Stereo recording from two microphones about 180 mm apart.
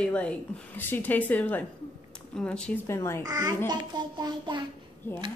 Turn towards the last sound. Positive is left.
turn(degrees=15)  # may be behind; listen again after turning